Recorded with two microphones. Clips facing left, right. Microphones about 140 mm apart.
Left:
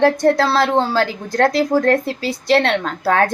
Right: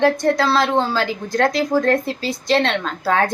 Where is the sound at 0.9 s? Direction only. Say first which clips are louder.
Left 2 dB; 60° left (ahead or behind).